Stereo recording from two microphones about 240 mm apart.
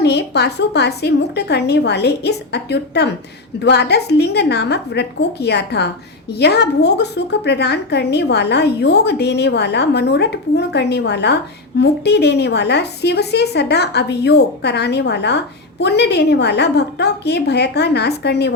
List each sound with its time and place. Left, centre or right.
0.0 s a woman's voice: left